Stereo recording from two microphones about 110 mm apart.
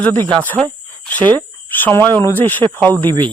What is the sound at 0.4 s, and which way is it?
Speech, 15° left (ahead or behind).